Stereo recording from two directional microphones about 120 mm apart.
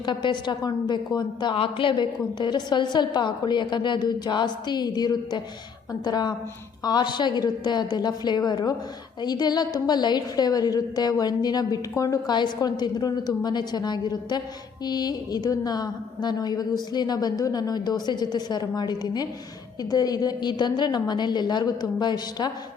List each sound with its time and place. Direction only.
0.0 s a woman's voice: 40° left (ahead or behind)